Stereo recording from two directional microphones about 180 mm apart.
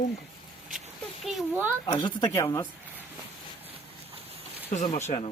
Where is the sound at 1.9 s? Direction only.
25° left (ahead or behind).